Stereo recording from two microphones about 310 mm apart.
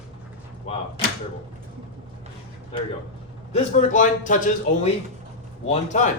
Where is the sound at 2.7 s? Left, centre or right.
Centre.